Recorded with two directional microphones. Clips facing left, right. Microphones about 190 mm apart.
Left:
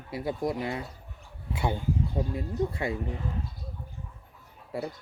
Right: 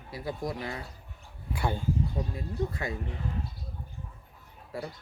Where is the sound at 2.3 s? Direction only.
30° left (ahead or behind).